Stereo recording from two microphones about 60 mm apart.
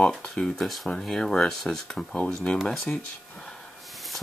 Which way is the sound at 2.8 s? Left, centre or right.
Centre.